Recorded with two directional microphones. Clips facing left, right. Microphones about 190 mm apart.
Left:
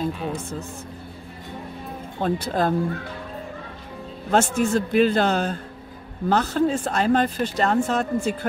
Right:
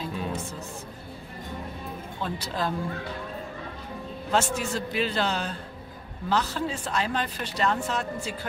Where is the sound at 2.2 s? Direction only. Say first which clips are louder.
Left 8 dB; 50° left (ahead or behind).